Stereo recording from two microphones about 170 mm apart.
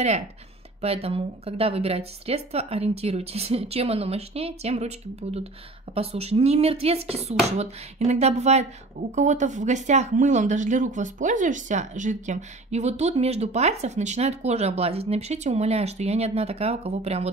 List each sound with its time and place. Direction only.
0.7 s speech: 35° right (ahead or behind)